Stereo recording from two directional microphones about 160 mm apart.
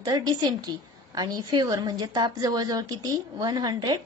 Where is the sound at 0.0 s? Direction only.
25° right (ahead or behind).